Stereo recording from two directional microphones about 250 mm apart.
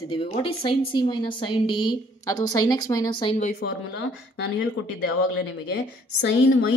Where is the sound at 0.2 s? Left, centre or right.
Left.